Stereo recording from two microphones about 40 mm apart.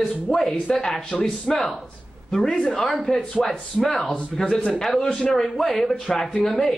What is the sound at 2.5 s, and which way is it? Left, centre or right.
A man's voice, centre.